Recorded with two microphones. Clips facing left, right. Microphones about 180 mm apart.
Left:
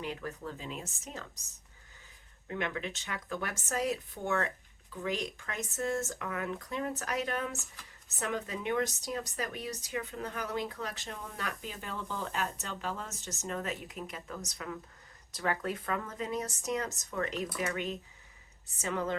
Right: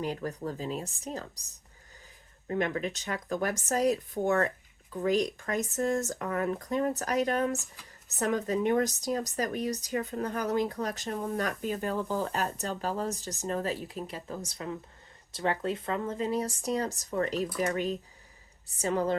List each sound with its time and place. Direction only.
0.0 s speech: 40° right (ahead or behind)
2.5 s speech: 40° right (ahead or behind)